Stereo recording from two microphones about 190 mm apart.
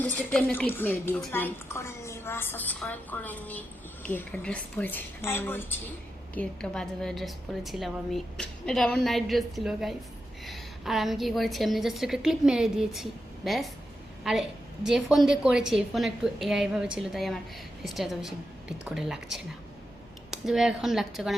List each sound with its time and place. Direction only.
0.0 s a woman's voice: 10° left (ahead or behind)